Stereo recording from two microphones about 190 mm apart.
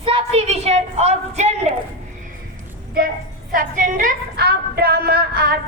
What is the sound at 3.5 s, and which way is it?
A woman's voice, 45° right (ahead or behind).